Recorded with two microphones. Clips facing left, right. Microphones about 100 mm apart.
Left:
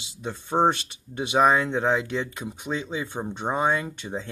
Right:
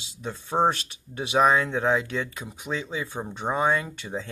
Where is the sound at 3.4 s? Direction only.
20° left (ahead or behind).